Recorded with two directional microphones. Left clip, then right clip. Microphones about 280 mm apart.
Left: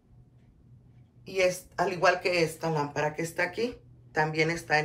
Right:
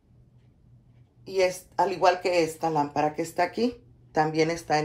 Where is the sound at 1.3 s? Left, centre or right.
Centre.